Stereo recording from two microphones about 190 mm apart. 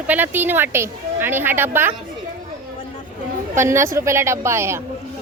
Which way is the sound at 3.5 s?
15° right (ahead or behind).